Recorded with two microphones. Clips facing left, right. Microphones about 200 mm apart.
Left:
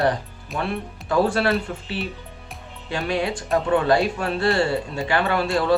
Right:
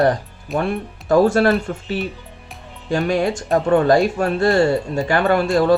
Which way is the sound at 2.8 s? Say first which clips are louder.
Right 6 dB; 45° right (ahead or behind).